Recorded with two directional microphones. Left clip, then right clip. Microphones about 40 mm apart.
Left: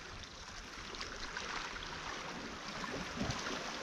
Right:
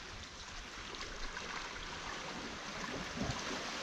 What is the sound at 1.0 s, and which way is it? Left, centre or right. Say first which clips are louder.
Boat: left 3 dB; left.